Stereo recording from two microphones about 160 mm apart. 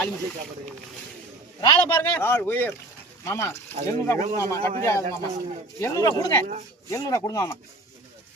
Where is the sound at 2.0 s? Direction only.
15° left (ahead or behind).